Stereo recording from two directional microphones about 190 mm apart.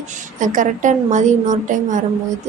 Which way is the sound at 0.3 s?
45° right (ahead or behind).